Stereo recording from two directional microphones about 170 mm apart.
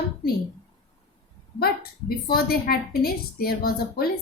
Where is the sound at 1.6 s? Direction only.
60° left (ahead or behind).